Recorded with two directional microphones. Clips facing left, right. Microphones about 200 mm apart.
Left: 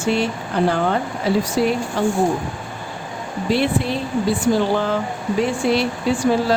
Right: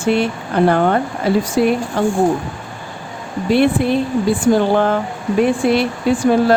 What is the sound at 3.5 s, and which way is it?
Speech, 55° right (ahead or behind).